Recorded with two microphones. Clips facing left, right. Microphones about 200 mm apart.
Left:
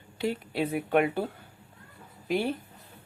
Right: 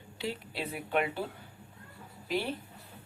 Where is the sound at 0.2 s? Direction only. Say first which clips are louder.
Left 8 dB; 50° left (ahead or behind).